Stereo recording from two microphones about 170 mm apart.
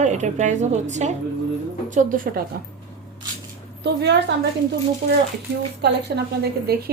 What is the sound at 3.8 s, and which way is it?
Speech, 90° right.